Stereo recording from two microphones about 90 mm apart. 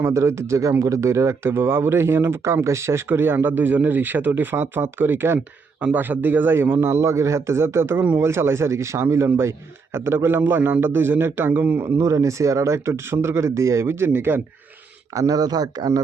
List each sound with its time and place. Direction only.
0.0 s speech: 30° right (ahead or behind)
11.9 s speech: 35° right (ahead or behind)
15.1 s speech: 40° right (ahead or behind)